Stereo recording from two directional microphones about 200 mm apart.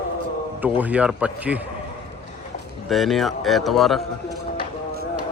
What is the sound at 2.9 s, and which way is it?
Speech, centre (ahead or behind).